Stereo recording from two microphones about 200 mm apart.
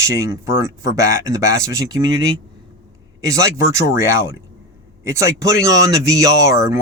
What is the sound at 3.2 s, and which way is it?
Speech, 15° right (ahead or behind).